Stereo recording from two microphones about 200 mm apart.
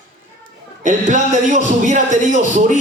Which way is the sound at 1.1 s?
40° right (ahead or behind).